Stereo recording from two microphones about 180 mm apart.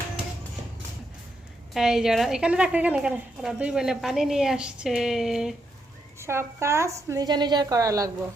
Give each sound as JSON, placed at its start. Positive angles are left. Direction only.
{"t": 1.7, "sound": "a woman's voice", "side_deg": 0}
{"t": 6.1, "sound": "a woman's voice", "side_deg": -15}